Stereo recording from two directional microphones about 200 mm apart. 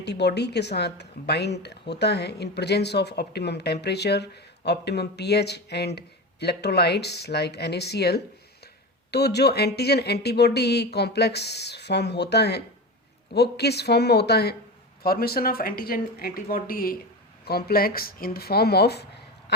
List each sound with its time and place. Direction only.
0.0 s speech: 55° left (ahead or behind)